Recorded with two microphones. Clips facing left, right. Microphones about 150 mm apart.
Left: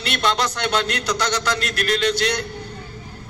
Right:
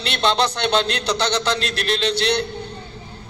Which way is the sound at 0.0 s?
30° right (ahead or behind).